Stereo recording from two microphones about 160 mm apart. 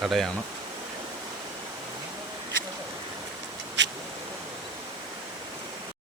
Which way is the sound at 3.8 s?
90° right.